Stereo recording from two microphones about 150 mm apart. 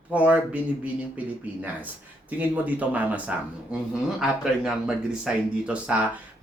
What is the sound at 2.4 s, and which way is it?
Speech, 10° right (ahead or behind).